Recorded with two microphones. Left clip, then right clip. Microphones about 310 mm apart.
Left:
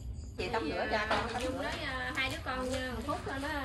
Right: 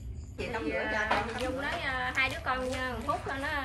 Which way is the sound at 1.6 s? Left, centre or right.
Centre.